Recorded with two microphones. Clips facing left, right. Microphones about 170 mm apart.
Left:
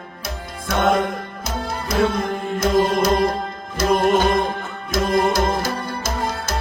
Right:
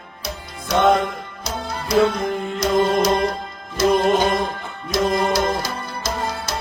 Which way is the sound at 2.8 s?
25° right (ahead or behind).